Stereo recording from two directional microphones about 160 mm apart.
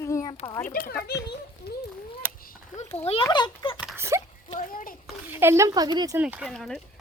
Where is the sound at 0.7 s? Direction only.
65° left (ahead or behind).